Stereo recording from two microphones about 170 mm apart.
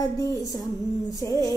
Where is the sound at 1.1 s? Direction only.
20° left (ahead or behind).